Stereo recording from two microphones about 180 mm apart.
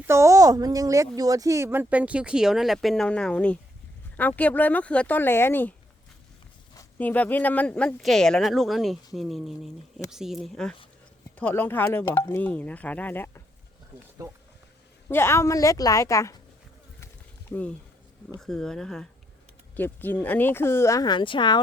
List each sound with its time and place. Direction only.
0.0 s speech: 15° right (ahead or behind); by 5.7 s 10° left (ahead or behind)
7.0 s speech: 10° left (ahead or behind)
15.1 s speech: 15° left (ahead or behind)
17.5 s speech: 5° left (ahead or behind); by 21.6 s 25° left (ahead or behind)